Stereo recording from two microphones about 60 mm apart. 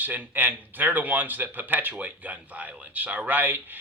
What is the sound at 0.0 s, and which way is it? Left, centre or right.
Speech, right.